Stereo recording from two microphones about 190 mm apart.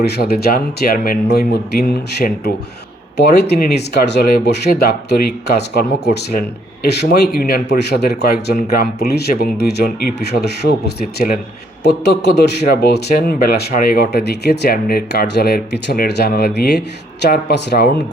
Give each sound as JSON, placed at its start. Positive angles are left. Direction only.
{"t": 0.0, "sound": "a man's voice", "side_deg": 55}